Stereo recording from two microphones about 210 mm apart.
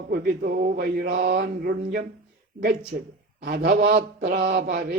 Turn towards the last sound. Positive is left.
turn(degrees=-40)  # may be behind; listen again after turning